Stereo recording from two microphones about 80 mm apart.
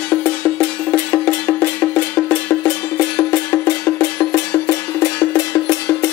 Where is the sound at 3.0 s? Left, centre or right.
Left.